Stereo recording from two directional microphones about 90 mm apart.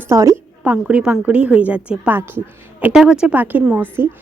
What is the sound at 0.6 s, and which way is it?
A woman's voice, 15° right (ahead or behind).